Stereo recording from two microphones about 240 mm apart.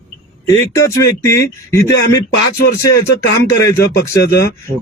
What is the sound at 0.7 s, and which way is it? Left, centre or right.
Speech, centre.